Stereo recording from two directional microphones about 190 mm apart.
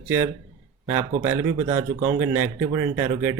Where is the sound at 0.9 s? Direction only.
10° right (ahead or behind).